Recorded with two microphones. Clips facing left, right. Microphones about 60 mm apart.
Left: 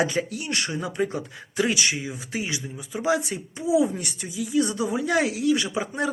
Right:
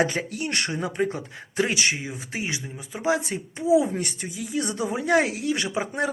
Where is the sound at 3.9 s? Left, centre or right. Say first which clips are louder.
Right 2 dB; right.